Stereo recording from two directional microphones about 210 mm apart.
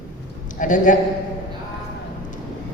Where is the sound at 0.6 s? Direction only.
35° left (ahead or behind).